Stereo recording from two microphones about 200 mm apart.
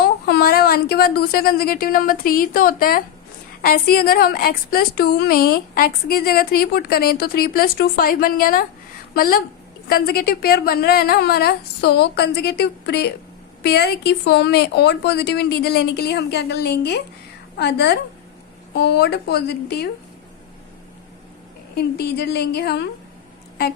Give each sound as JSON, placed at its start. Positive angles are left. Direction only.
{"t": 0.0, "sound": "a woman's voice", "side_deg": 50}
{"t": 21.9, "sound": "speech", "side_deg": 55}